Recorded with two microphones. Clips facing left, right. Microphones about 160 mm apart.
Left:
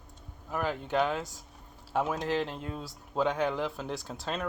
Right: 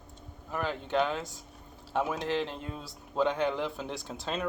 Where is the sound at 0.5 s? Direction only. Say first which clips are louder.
Even; 5° left (ahead or behind).